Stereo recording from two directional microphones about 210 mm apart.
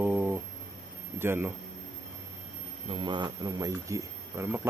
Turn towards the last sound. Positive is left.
turn(degrees=-10)  # may be behind; listen again after turning